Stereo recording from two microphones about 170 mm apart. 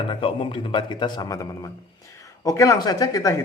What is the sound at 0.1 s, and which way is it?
A man's voice, 30° left (ahead or behind).